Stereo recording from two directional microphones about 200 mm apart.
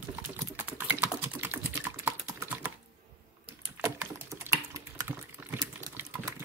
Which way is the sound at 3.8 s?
15° right (ahead or behind).